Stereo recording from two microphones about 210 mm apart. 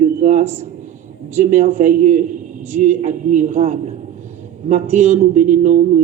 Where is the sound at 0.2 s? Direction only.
35° right (ahead or behind).